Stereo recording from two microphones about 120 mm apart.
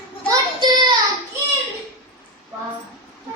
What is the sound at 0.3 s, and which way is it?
Child singing, 35° right (ahead or behind).